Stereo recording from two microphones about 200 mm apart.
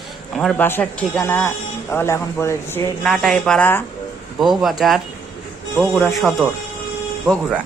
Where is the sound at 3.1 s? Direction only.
Centre (ahead or behind).